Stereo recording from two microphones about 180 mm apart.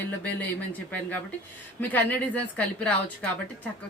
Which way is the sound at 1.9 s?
10° left (ahead or behind).